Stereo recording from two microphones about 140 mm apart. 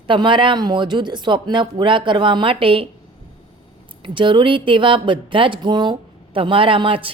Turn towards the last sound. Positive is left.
turn(degrees=-40)  # may be behind; listen again after turning